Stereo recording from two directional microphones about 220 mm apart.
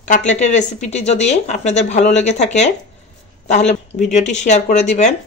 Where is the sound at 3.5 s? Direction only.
30° left (ahead or behind).